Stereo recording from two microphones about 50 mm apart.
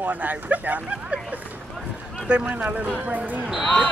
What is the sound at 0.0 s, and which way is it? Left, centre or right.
Speech, right.